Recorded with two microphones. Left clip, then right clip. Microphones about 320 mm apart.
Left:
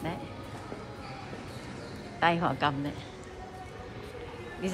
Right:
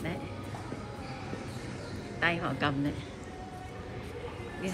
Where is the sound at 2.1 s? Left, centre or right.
Centre.